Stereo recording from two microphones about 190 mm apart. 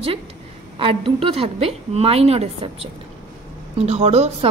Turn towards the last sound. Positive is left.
turn(degrees=-35)  # may be behind; listen again after turning